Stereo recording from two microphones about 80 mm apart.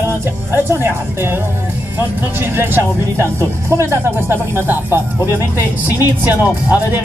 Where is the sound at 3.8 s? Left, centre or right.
Right.